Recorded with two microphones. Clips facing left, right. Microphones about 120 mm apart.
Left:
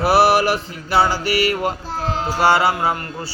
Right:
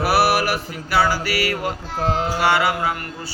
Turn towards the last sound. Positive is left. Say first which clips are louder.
# left 3 dB
turn(degrees=30)  # may be behind; listen again after turning